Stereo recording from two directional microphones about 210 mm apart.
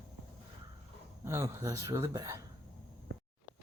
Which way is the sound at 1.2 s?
15° right (ahead or behind).